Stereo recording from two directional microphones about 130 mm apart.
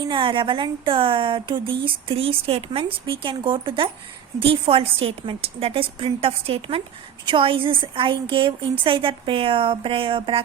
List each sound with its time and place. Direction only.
0.0 s a woman's voice: 40° right (ahead or behind)